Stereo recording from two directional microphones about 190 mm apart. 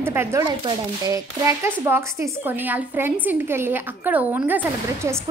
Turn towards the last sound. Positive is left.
turn(degrees=-10)  # may be behind; listen again after turning